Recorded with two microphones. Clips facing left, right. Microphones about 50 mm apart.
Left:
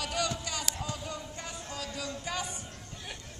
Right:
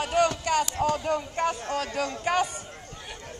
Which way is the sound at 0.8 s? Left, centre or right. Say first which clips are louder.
Right 13 dB; right.